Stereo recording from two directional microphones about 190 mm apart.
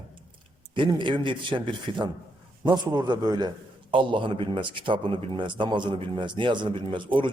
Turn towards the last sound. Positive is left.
turn(degrees=-25)  # may be behind; listen again after turning